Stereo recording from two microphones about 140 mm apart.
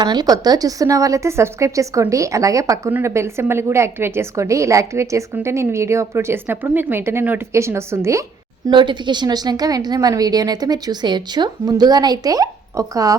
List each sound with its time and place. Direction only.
0.0 s a woman's voice: 30° right (ahead or behind)
8.6 s a woman's voice: 35° right (ahead or behind)